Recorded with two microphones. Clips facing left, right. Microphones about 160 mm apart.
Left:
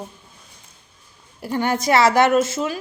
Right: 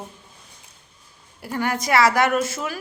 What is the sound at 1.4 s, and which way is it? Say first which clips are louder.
A woman's voice: left 4 dB; 25° left (ahead or behind).